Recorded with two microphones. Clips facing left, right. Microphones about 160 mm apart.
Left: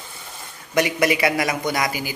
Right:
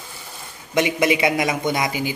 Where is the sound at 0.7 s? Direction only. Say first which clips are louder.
Right 1 dB; 20° right (ahead or behind).